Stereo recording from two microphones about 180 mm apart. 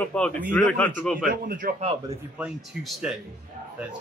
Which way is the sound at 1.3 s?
55° right (ahead or behind).